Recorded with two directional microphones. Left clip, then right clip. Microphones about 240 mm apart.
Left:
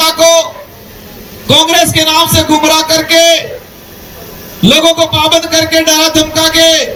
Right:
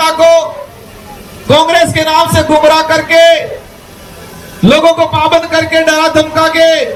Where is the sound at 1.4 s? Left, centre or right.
Left.